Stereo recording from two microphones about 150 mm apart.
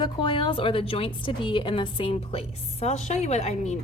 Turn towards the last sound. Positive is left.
turn(degrees=50)  # may be behind; listen again after turning